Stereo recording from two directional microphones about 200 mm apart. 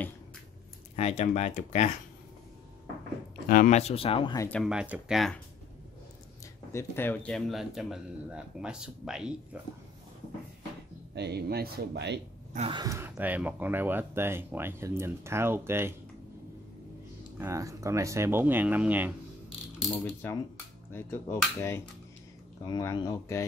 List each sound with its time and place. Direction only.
0.9 s speech: 35° left (ahead or behind)
3.4 s speech: 40° left (ahead or behind); by 4.5 s 25° left (ahead or behind)
4.5 s speech: centre (ahead or behind)
6.7 s speech: 10° left (ahead or behind); by 9.6 s 5° right (ahead or behind)
11.1 s speech: 55° right (ahead or behind)
12.5 s speech: 25° right (ahead or behind)
17.4 s speech: 15° right (ahead or behind)
20.1 s speech: 10° left (ahead or behind)